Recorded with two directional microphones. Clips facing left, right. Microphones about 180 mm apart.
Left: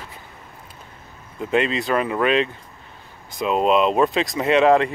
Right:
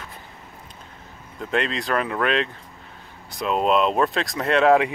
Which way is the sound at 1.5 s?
5° left (ahead or behind).